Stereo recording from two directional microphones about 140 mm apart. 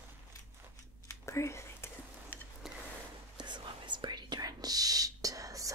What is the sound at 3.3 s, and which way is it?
Whispering, 35° right (ahead or behind).